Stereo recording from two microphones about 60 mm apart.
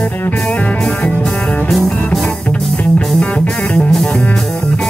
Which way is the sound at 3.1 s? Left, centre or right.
Left.